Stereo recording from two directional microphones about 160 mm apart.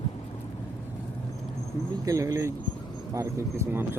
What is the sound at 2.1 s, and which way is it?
Speech, 20° right (ahead or behind).